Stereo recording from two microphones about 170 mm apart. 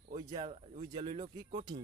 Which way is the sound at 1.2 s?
30° right (ahead or behind).